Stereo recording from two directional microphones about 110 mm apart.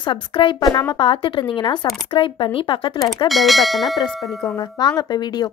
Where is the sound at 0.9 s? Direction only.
55° left (ahead or behind).